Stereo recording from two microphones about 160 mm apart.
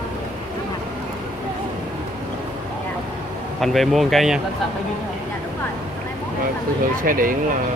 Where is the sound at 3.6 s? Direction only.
Centre (ahead or behind).